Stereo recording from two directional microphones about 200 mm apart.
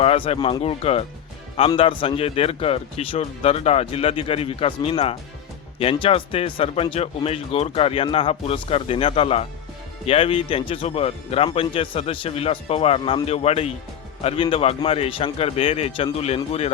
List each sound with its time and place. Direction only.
0.0 s speech: 30° left (ahead or behind)